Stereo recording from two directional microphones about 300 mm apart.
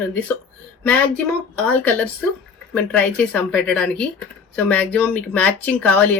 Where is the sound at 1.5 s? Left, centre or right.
Centre.